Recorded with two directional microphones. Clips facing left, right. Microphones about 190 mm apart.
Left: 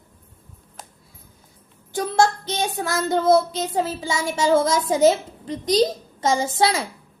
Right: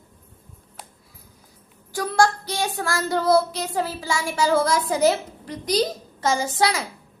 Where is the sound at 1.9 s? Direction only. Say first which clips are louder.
Left 1 dB; 20° left (ahead or behind).